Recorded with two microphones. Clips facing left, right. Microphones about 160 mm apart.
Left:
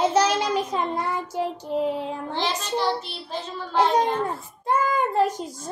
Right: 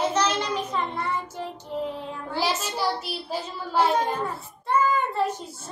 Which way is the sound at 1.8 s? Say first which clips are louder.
Left 6 dB; 90° left.